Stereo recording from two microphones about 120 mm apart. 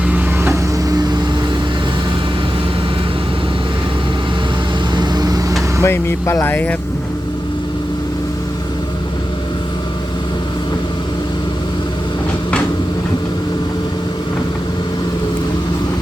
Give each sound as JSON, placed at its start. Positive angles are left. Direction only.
{"t": 0.1, "sound": "vehicle", "side_deg": -15}
{"t": 4.9, "sound": "vehicle", "side_deg": -35}
{"t": 5.8, "sound": "speech", "side_deg": 20}